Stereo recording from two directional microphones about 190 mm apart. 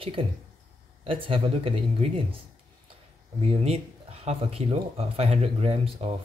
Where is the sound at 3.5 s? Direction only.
30° right (ahead or behind).